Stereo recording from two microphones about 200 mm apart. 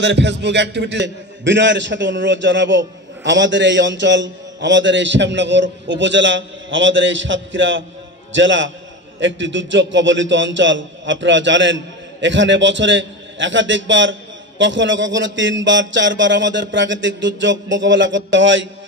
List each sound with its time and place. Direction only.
0.0 s a man's voice: 60° right (ahead or behind)